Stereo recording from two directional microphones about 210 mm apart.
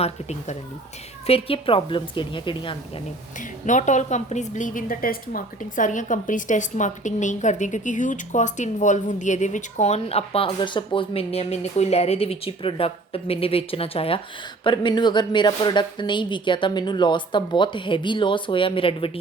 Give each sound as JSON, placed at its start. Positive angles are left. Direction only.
{"t": 0.0, "sound": "a woman's voice", "side_deg": 30}
{"t": 3.7, "sound": "a woman's voice", "side_deg": 35}